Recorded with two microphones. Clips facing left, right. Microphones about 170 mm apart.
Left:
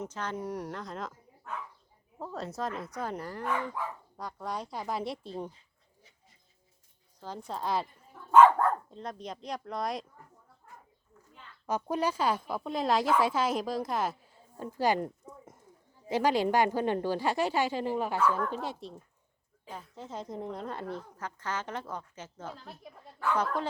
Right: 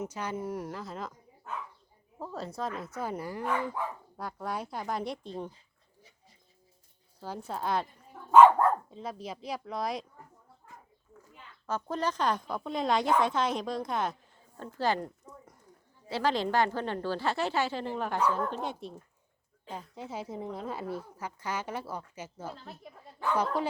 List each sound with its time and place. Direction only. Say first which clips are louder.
0.0 s speech: right 1 dB; 10° right (ahead or behind)
7.2 s speech: right 1 dB; 5° right (ahead or behind)
11.6 s speech: left 2 dB; 15° left (ahead or behind)
19.7 s a woman's voice: right 2 dB; 10° right (ahead or behind)
23.2 s a woman's voice: right 1 dB; 15° right (ahead or behind)